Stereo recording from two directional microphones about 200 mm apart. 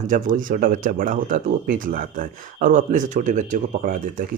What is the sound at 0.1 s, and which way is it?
Speech, 40° right (ahead or behind).